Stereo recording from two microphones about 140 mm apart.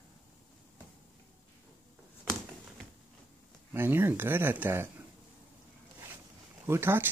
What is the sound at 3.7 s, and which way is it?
Speech, 15° right (ahead or behind).